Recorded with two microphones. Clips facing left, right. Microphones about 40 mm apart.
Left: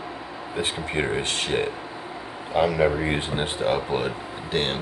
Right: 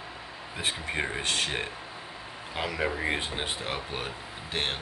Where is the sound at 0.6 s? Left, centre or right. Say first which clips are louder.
Left 5 dB; centre.